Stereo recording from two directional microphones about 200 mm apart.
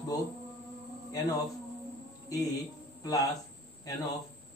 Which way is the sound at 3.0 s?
20° left (ahead or behind).